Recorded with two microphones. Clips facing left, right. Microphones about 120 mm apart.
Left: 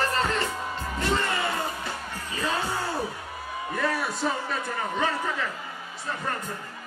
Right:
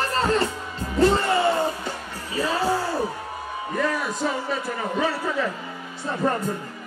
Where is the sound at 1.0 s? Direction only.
35° right (ahead or behind).